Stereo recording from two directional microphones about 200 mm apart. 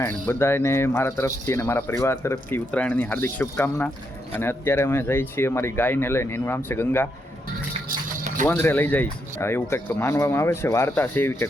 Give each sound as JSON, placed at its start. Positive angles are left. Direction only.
{"t": 0.3, "sound": "speech", "side_deg": 10}
{"t": 7.9, "sound": "music", "side_deg": -40}
{"t": 8.4, "sound": "speech", "side_deg": 10}